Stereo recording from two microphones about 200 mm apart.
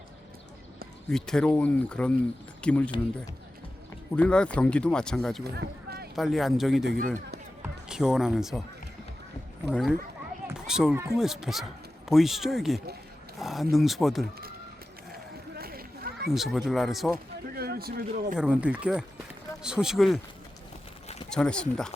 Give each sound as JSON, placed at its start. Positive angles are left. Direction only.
{"t": 1.1, "sound": "speech", "side_deg": 5}
{"t": 4.1, "sound": "speech", "side_deg": 5}
{"t": 5.4, "sound": "a sound", "side_deg": -50}
{"t": 6.1, "sound": "speech", "side_deg": 0}
{"t": 6.8, "sound": "speech", "side_deg": -55}
{"t": 7.9, "sound": "speech", "side_deg": -5}
{"t": 9.6, "sound": "speech", "side_deg": -5}
{"t": 10.4, "sound": "a sound", "side_deg": -5}
{"t": 11.2, "sound": "speech", "side_deg": 0}
{"t": 15.1, "sound": "a sound", "side_deg": -50}
{"t": 16.3, "sound": "speech", "side_deg": 0}
{"t": 17.5, "sound": "speech", "side_deg": -50}
{"t": 18.3, "sound": "speech", "side_deg": -5}
{"t": 21.2, "sound": "speech", "side_deg": 5}